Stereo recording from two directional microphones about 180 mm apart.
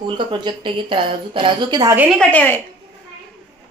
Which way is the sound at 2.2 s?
10° left (ahead or behind).